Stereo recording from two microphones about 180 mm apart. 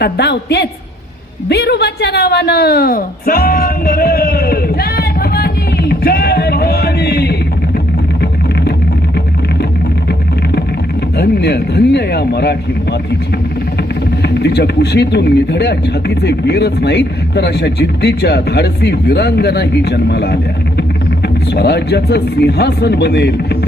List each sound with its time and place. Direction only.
0.0 s speech: 65° left (ahead or behind)
11.2 s speech: 65° left (ahead or behind)
14.2 s speech: 70° left (ahead or behind)